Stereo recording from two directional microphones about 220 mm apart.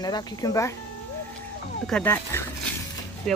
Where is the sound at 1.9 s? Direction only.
10° left (ahead or behind).